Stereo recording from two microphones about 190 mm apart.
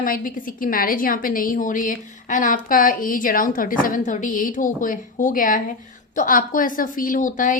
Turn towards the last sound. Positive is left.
turn(degrees=45)  # may be behind; listen again after turning